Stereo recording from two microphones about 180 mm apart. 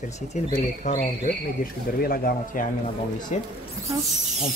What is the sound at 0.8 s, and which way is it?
Speech, 40° left (ahead or behind).